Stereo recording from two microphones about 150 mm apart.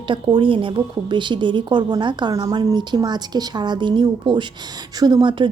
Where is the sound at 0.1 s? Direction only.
35° right (ahead or behind).